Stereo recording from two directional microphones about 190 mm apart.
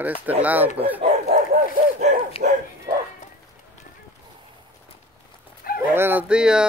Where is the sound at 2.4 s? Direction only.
55° right (ahead or behind).